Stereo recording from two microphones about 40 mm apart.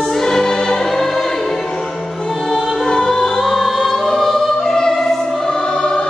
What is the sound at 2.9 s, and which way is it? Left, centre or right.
Music, centre.